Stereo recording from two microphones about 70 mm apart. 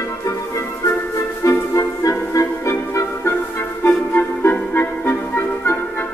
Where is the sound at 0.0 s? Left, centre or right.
Left.